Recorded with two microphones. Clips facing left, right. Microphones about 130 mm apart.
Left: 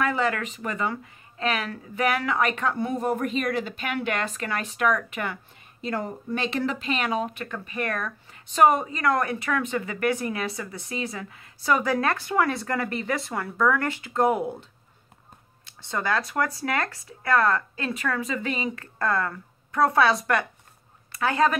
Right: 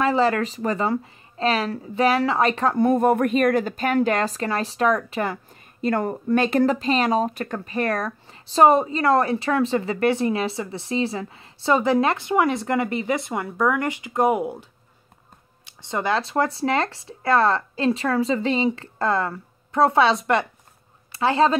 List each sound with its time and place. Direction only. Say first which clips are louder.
0.0 s a woman's voice: right 5 dB; 30° right (ahead or behind)
2.8 s a woman's voice: right 11 dB; 55° right (ahead or behind); by 5.4 s 35° right (ahead or behind)
5.8 s speech: right 7 dB; 55° right (ahead or behind); by 14.7 s 10° right (ahead or behind)
15.8 s a woman's voice: right 3 dB; 20° right (ahead or behind)